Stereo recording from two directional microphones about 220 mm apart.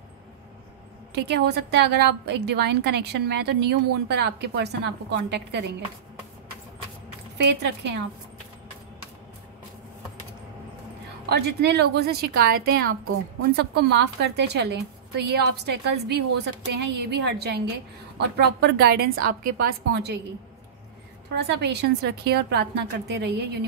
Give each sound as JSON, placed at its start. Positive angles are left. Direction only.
{"t": 1.1, "sound": "a woman's voice", "side_deg": -50}
{"t": 7.3, "sound": "a woman's voice", "side_deg": -50}
{"t": 11.2, "sound": "a woman's voice", "side_deg": -50}
{"t": 21.4, "sound": "a woman's voice", "side_deg": -50}